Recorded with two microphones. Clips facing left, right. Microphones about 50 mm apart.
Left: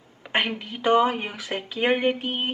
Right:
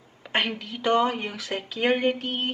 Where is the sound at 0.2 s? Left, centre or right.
Centre.